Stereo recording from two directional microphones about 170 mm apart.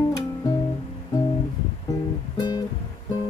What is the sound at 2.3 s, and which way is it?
Music, 25° left (ahead or behind).